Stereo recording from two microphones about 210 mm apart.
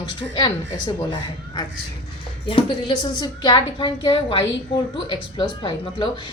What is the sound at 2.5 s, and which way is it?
A woman's voice, 25° left (ahead or behind).